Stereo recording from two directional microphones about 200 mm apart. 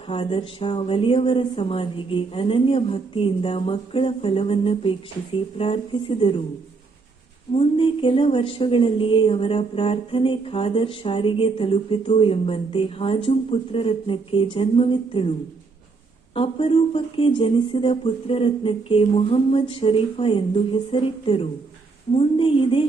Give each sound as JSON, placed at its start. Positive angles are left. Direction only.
{"t": 0.1, "sound": "a woman's voice", "side_deg": 25}
{"t": 7.5, "sound": "a woman's voice", "side_deg": 25}
{"t": 16.3, "sound": "a woman's voice", "side_deg": 25}